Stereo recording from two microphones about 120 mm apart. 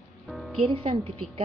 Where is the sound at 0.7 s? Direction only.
50° right (ahead or behind).